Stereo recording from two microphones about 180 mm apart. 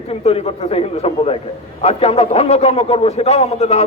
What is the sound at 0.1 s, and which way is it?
A man's voice, 35° left (ahead or behind).